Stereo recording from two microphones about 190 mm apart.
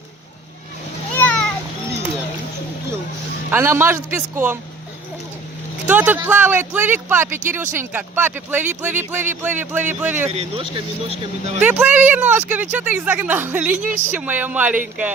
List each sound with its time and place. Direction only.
1.2 s a sound: 5° left (ahead or behind)
3.5 s speech: 10° right (ahead or behind)
5.9 s speech: 10° right (ahead or behind)
10.2 s speech: 35° right (ahead or behind)
11.6 s speech: 10° right (ahead or behind)